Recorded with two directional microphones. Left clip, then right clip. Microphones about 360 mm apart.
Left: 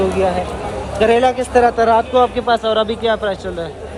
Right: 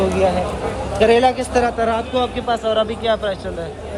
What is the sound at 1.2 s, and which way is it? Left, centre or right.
Speech, centre.